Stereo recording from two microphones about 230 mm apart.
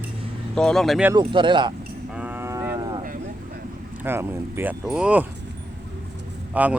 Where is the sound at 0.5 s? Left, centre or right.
Centre.